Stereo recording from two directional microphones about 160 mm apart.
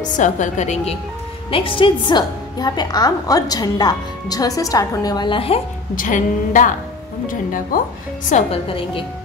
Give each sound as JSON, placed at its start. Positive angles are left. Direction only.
{"t": 0.0, "sound": "a woman's voice", "side_deg": 50}
{"t": 1.5, "sound": "a woman's voice", "side_deg": 30}
{"t": 5.9, "sound": "a woman's voice", "side_deg": 55}
{"t": 8.6, "sound": "speech", "side_deg": 35}